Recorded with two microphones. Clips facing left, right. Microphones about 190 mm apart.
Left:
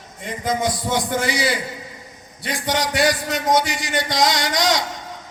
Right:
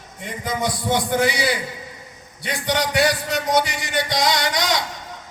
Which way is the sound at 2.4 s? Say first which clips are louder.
Even; 55° right (ahead or behind).